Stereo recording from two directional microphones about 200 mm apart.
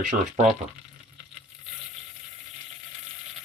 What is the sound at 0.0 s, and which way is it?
Speech, 35° right (ahead or behind).